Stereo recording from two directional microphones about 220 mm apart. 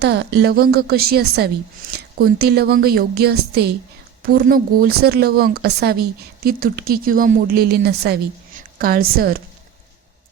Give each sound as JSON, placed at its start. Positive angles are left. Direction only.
{"t": 0.0, "sound": "a woman's voice", "side_deg": -45}